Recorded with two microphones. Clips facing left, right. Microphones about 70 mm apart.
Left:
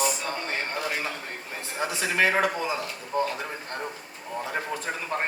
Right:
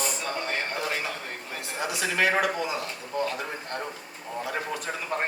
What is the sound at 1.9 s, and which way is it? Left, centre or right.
A woman's voice, left.